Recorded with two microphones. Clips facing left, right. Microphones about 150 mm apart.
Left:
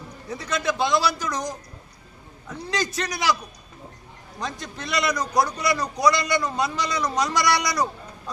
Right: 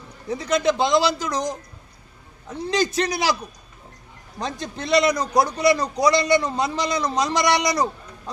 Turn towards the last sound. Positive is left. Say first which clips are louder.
# right 3 dB
turn(degrees=-25)  # may be behind; listen again after turning